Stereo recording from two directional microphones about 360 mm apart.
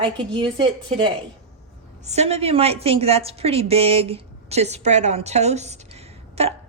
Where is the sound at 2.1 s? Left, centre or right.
Centre.